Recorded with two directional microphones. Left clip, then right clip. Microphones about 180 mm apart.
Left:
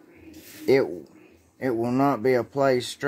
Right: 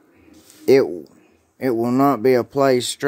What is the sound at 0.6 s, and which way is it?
Speech, 50° right (ahead or behind).